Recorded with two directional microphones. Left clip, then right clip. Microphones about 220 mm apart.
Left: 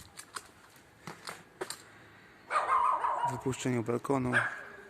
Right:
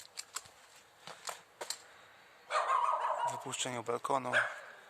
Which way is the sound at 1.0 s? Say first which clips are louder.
Left 1 dB; centre (ahead or behind).